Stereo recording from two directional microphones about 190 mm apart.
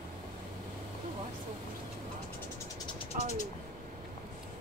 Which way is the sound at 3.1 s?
45° right (ahead or behind).